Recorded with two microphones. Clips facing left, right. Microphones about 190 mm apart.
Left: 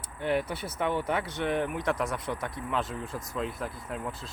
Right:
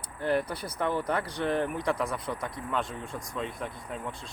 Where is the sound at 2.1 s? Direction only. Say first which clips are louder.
Even; 25° left (ahead or behind).